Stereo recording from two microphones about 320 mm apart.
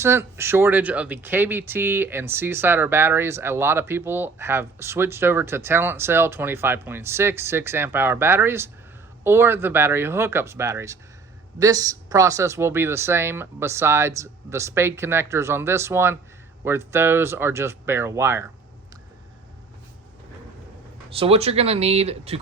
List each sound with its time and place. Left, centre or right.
0.0 s speech: centre
21.2 s speech: centre